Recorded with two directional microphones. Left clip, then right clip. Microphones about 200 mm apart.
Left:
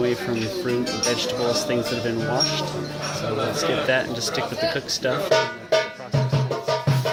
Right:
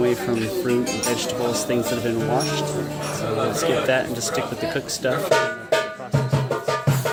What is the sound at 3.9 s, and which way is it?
Speech, centre (ahead or behind).